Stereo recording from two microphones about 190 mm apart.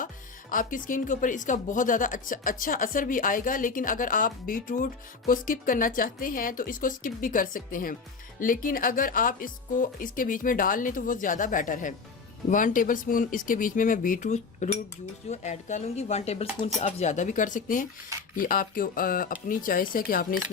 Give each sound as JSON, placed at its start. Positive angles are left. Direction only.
{"t": 0.5, "sound": "speech", "side_deg": 45}